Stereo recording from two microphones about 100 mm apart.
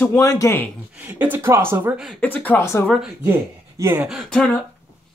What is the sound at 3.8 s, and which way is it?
Speech, 30° right (ahead or behind).